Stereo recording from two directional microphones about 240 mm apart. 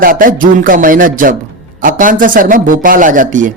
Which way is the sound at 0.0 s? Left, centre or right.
Right.